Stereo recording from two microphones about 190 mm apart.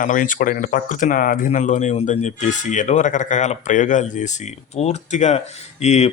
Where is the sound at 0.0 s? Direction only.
45° left (ahead or behind).